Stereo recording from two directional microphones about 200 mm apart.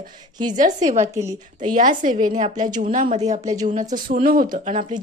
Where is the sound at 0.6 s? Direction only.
35° right (ahead or behind).